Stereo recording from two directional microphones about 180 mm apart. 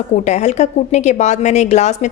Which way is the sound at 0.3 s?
40° left (ahead or behind).